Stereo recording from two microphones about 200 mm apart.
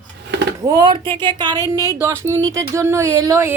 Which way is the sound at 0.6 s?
20° right (ahead or behind).